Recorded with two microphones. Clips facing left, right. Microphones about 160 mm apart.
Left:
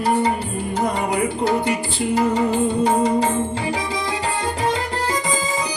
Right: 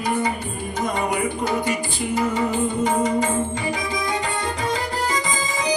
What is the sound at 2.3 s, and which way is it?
Music, 35° left (ahead or behind).